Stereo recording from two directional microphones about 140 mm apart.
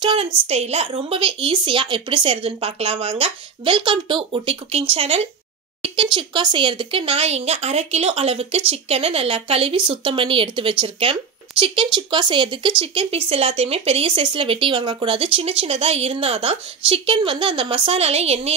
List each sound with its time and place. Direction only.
0.0 s speech: 40° right (ahead or behind)
0.5 s speech: 50° right (ahead or behind)